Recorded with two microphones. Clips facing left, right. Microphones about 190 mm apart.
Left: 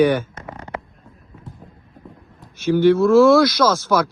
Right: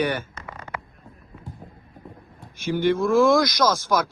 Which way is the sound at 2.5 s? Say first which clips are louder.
Left 7 dB; 15° right (ahead or behind).